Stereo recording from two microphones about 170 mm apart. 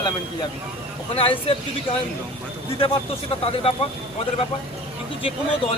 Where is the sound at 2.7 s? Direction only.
35° left (ahead or behind).